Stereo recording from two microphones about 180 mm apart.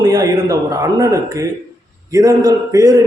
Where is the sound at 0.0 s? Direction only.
20° right (ahead or behind).